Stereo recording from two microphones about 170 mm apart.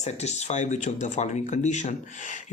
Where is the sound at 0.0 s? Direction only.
40° left (ahead or behind).